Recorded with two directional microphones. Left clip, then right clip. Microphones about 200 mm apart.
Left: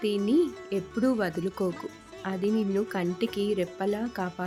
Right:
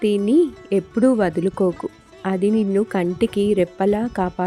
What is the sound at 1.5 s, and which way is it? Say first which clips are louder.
Speech: right 10 dB; centre (ahead or behind).